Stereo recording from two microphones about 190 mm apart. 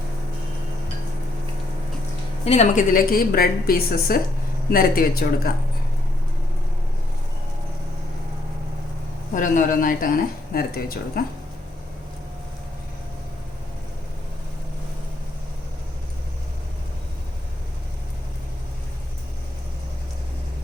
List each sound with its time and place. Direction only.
2.4 s speech: 35° left (ahead or behind); by 5.3 s 50° left (ahead or behind)
9.3 s speech: 45° left (ahead or behind)